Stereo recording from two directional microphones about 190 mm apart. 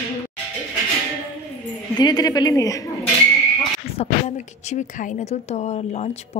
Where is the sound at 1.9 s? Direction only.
20° left (ahead or behind).